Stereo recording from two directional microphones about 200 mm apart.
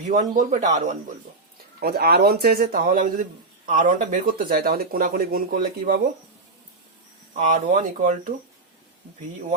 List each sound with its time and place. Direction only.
0.1 s speech: 40° right (ahead or behind)
1.8 s speech: 50° right (ahead or behind)
7.3 s speech: 40° right (ahead or behind)